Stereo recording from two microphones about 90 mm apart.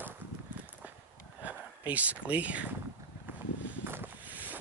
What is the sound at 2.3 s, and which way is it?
Speech, 15° right (ahead or behind).